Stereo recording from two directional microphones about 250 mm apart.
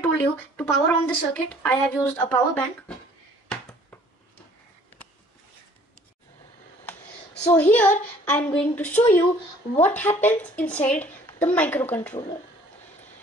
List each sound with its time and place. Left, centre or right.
0.0 s speech: centre
3.4 s a sound: centre
7.4 s a woman's voice: centre
12.1 s speech: left